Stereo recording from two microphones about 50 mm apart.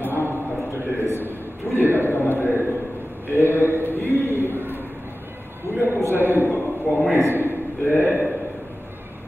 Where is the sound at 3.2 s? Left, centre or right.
Right.